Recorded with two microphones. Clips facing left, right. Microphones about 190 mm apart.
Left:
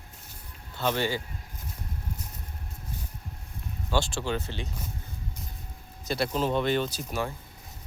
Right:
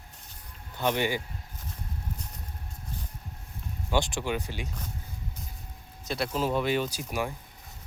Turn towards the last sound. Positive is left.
turn(degrees=-10)  # may be behind; listen again after turning